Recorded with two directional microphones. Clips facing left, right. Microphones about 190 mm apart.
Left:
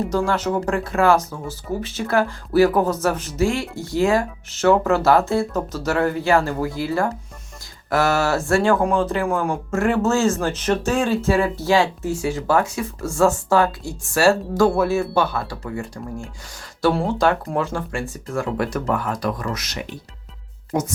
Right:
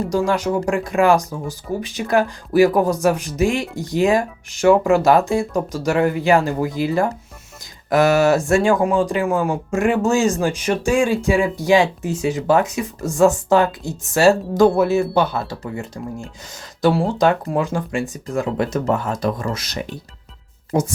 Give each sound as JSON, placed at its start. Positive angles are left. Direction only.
{"t": 0.3, "sound": "speech", "side_deg": -10}